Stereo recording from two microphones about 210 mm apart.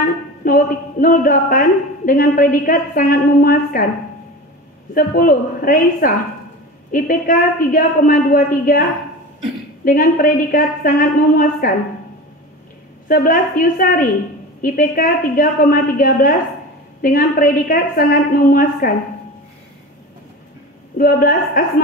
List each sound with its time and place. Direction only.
0.0 s speech: 40° left (ahead or behind)
4.9 s a woman's voice: 45° left (ahead or behind)
9.8 s speech: 40° left (ahead or behind)
13.1 s a woman's voice: 40° left (ahead or behind)
21.0 s speech: 40° left (ahead or behind)